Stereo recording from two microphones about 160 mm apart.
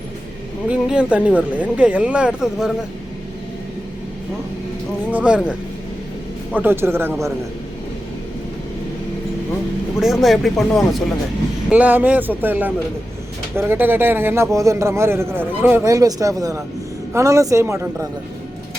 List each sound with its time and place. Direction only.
0.7 s speech: 5° right (ahead or behind)
5.1 s speech: 5° right (ahead or behind)
10.0 s speech: centre (ahead or behind)
11.7 s a man's voice: 10° right (ahead or behind)